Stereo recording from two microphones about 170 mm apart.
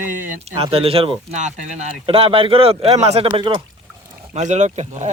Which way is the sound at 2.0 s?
35° right (ahead or behind).